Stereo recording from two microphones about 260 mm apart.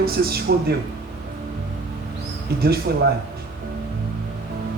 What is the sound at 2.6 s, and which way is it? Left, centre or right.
Speech, right.